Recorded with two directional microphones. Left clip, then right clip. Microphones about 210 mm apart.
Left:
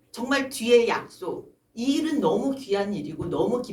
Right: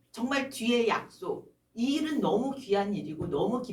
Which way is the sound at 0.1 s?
35° left (ahead or behind).